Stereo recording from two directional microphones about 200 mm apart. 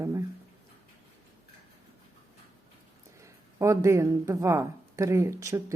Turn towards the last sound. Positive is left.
turn(degrees=-15)  # may be behind; listen again after turning